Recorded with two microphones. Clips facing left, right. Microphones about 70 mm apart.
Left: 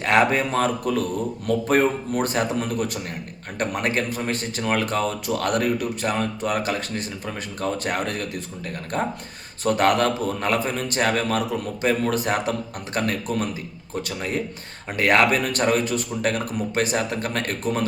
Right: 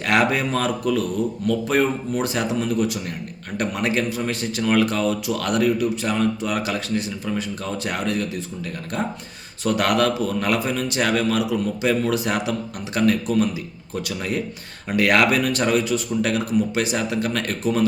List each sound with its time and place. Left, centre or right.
0.0 s a man's voice: left
14.9 s a man's voice: left